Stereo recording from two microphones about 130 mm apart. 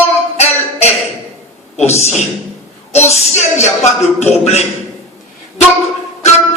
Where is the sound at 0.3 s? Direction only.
55° left (ahead or behind).